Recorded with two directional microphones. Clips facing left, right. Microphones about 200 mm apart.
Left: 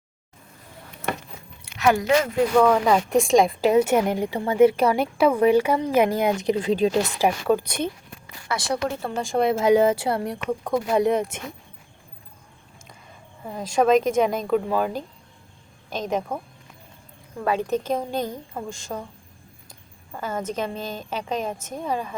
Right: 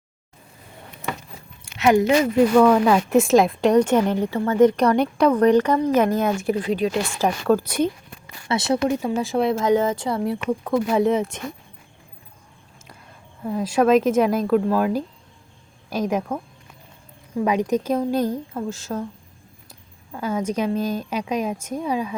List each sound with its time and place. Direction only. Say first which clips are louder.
1.8 s speech: right 3 dB; 20° right (ahead or behind)
2.6 s speech: right 1 dB; 5° right (ahead or behind); by 7.1 s 30° left (ahead or behind)
7.2 s speech: right 3 dB; 15° left (ahead or behind)
7.5 s a woman's voice: right 4 dB; 10° right (ahead or behind)
8.4 s speech: right 5 dB; 25° right (ahead or behind)
9.0 s speech: right 2 dB; 10° right (ahead or behind)
9.6 s speech: left 2 dB; 10° left (ahead or behind)
10.2 s speech: right 3 dB; 5° right (ahead or behind)
13.4 s a woman's voice: right 2 dB; 5° right (ahead or behind)
17.3 s a woman's voice: right 3 dB; 15° right (ahead or behind)
20.1 s a woman's voice: right 4 dB; 10° right (ahead or behind)